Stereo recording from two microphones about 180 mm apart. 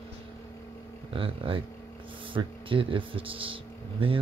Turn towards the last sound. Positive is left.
turn(degrees=-30)  # may be behind; listen again after turning